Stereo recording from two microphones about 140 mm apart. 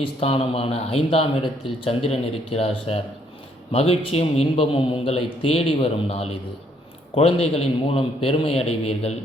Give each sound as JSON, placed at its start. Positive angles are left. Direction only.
{"t": 0.0, "sound": "speech", "side_deg": 45}